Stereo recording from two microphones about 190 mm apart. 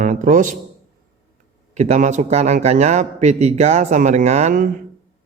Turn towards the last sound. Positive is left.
turn(degrees=-40)  # may be behind; listen again after turning